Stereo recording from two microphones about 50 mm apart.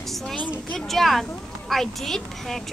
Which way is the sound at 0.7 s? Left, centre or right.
Centre.